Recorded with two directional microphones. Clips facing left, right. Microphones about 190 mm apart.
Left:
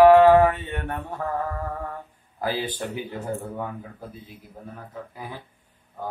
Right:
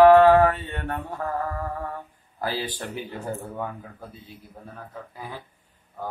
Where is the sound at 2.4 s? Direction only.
15° left (ahead or behind).